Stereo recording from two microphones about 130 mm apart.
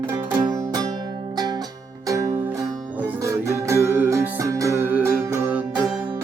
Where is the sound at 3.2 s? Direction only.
25° right (ahead or behind).